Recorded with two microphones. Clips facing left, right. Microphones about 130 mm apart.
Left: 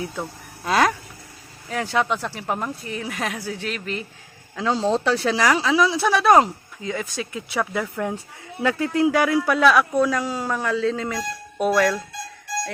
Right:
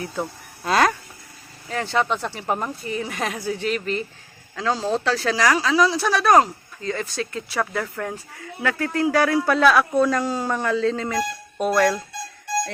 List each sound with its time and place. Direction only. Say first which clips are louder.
0.6 s a sound: even; 5° left (ahead or behind)
1.7 s speech: even; 5° left (ahead or behind)
4.5 s speech: left 2 dB; 15° left (ahead or behind)